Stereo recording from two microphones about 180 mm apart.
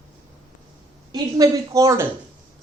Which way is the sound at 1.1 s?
20° right (ahead or behind).